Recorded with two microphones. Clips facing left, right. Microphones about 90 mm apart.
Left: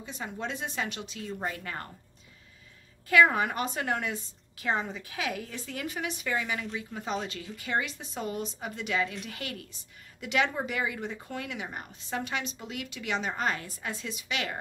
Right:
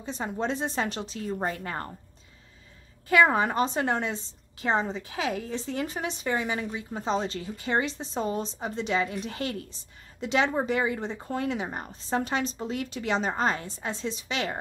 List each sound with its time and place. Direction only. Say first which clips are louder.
0.0 s speech: right 6 dB; 30° right (ahead or behind)
3.1 s a woman's voice: right 2 dB; 30° right (ahead or behind)